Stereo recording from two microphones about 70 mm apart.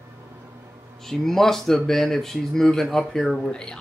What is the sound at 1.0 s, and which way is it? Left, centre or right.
Speech, centre.